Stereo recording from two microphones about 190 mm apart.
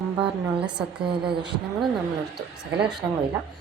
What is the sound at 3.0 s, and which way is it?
Speech, 15° right (ahead or behind).